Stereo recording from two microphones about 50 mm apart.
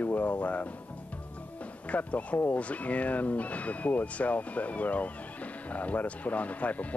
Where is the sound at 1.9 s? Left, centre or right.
Left.